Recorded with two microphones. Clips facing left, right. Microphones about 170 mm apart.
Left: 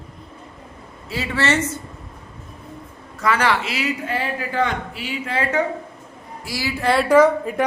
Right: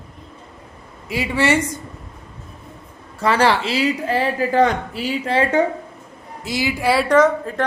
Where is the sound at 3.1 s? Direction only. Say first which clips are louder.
Right 3 dB; 30° right (ahead or behind).